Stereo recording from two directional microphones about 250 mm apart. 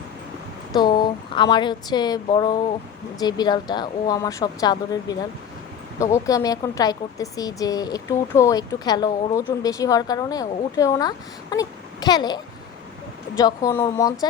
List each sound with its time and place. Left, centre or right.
0.8 s speech: centre